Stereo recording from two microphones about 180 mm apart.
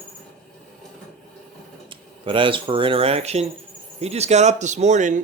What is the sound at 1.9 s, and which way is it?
Speech, 30° right (ahead or behind).